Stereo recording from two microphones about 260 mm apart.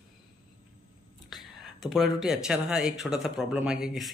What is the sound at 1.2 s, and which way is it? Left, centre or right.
Speech, centre.